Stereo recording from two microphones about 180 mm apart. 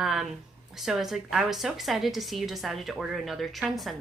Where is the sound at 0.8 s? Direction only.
Centre (ahead or behind).